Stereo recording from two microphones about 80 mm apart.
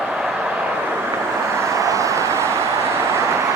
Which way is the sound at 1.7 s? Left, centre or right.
Right.